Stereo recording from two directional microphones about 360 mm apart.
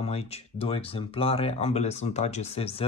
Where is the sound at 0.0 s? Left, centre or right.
Centre.